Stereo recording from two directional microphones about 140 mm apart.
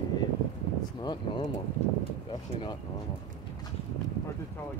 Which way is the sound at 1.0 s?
35° left (ahead or behind).